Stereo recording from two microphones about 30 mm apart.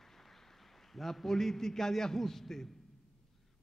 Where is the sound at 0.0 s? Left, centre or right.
Centre.